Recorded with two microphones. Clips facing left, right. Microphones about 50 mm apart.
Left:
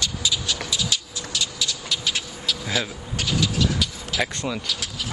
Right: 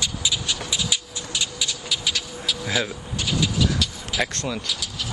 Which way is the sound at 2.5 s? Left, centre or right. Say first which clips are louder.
Right 1 dB; centre.